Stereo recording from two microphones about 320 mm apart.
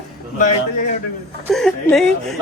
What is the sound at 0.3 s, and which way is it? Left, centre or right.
Speech, left.